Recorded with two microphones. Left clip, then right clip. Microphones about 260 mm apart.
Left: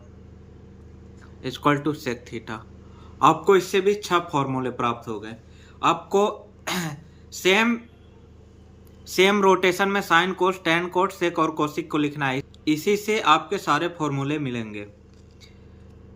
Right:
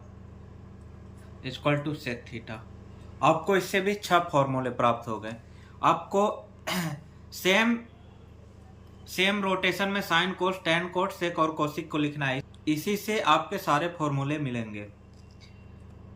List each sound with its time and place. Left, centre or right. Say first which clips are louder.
1.4 s a man's voice: left 6 dB; centre
9.0 s speech: left 9 dB; centre